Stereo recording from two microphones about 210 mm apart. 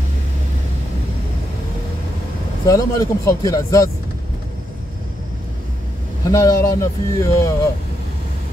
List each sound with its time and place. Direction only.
2.6 s speech: 15° left (ahead or behind)
6.2 s speech: 15° left (ahead or behind)